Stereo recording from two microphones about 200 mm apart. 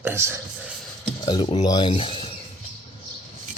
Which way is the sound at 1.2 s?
20° left (ahead or behind).